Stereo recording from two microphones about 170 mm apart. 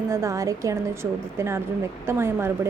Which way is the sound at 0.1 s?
20° right (ahead or behind).